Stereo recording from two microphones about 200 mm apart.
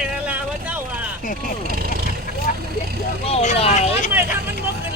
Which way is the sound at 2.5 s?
45° left (ahead or behind).